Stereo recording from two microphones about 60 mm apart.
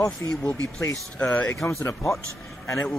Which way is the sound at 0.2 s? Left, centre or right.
Left.